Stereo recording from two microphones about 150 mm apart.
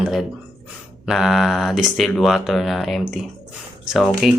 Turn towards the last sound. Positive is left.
turn(degrees=0)  # may be behind; listen again after turning